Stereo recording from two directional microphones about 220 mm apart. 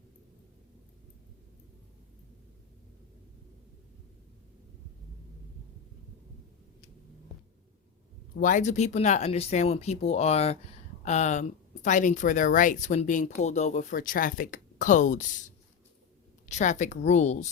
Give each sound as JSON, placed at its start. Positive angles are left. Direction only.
{"t": 8.4, "sound": "speech", "side_deg": 35}